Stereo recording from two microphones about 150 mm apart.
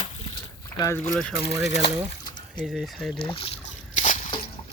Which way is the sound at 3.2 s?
40° left (ahead or behind).